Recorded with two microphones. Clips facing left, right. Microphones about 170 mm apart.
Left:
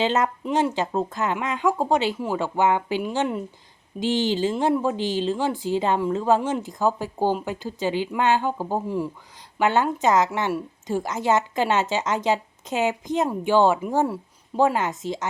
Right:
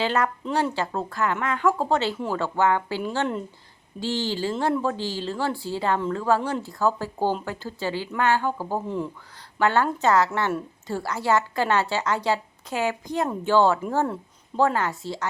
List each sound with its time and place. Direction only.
0.0 s a woman's voice: 20° left (ahead or behind)